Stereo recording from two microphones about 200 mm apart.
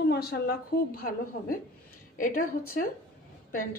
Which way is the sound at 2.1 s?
45° left (ahead or behind).